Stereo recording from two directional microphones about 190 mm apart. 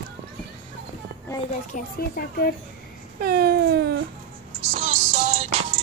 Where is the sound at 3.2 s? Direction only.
55° right (ahead or behind).